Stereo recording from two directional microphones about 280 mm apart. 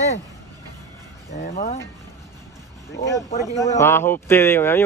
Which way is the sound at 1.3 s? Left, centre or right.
Left.